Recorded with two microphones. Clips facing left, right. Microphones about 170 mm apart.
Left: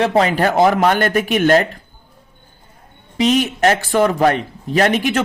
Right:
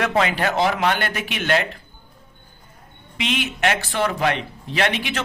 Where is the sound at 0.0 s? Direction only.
35° left (ahead or behind).